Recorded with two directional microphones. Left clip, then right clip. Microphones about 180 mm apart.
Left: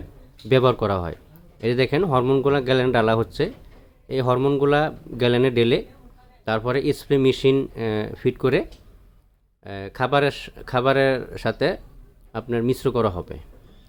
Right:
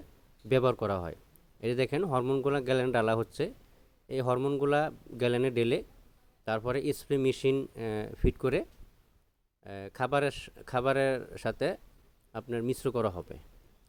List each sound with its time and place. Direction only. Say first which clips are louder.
0.4 s speech: left 9 dB; 40° right (ahead or behind)
9.6 s a man's voice: left 9 dB; 45° right (ahead or behind)